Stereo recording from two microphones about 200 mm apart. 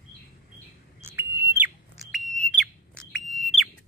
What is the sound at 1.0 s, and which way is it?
Bird, 10° right (ahead or behind).